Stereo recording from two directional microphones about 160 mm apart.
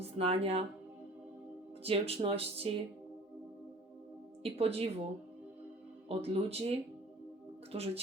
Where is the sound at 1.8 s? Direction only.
40° right (ahead or behind).